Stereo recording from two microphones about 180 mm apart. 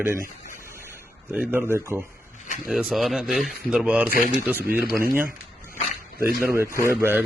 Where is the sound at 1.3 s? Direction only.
10° right (ahead or behind).